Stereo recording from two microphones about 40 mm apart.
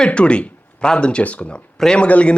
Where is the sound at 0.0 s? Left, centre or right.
Left.